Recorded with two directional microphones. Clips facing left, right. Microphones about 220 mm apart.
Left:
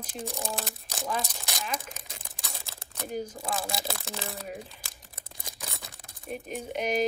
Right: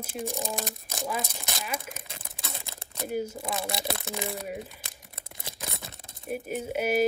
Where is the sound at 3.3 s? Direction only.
25° right (ahead or behind).